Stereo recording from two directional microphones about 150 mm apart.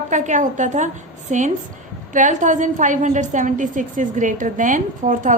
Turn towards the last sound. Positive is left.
turn(degrees=-55)  # may be behind; listen again after turning